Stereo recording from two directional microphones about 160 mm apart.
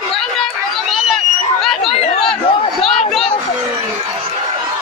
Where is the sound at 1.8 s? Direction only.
40° left (ahead or behind).